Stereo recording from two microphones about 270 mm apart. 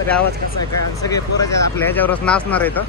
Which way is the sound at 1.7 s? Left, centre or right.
Centre.